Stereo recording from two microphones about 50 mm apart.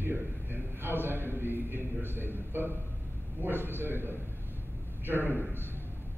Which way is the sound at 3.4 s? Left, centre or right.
Right.